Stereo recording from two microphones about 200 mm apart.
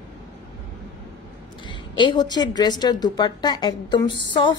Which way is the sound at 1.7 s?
25° left (ahead or behind).